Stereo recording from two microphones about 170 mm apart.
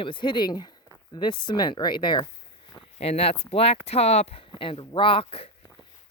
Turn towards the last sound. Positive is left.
turn(degrees=35)  # may be behind; listen again after turning